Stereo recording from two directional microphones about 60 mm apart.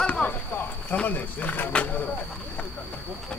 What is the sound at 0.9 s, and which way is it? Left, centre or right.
Speech, left.